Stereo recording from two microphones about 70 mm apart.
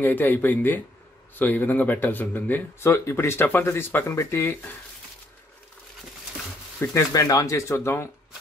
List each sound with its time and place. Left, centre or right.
0.0 s speech: left
2.8 s speech: left
6.9 s speech: left